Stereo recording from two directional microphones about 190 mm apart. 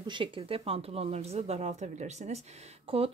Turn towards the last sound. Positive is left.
turn(degrees=-30)  # may be behind; listen again after turning